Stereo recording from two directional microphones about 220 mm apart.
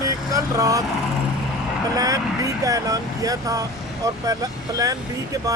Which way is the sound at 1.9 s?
15° right (ahead or behind).